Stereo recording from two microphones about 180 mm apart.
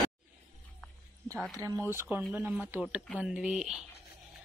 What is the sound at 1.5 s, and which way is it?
A woman's voice, 20° right (ahead or behind).